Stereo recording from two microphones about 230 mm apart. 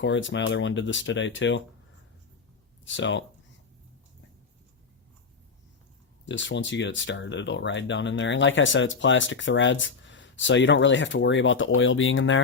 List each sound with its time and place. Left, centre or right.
0.0 s speech: left
2.8 s speech: left
6.2 s speech: left